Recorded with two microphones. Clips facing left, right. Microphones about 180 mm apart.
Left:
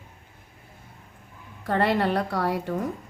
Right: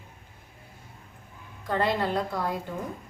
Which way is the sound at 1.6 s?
65° left (ahead or behind).